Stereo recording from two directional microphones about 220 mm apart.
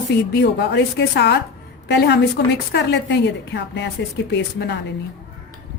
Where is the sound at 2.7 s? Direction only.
50° left (ahead or behind).